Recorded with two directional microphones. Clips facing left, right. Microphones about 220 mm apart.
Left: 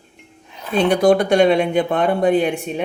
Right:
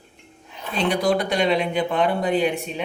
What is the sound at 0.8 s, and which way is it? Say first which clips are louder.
Speech: left 7 dB; 50° left (ahead or behind).